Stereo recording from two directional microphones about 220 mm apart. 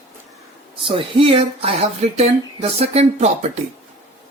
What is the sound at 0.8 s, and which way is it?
Speech, 25° right (ahead or behind).